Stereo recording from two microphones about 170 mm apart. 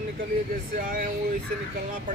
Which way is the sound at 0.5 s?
55° right (ahead or behind).